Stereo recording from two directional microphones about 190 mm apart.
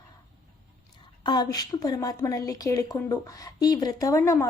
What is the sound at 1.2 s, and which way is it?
A woman's voice, 20° left (ahead or behind).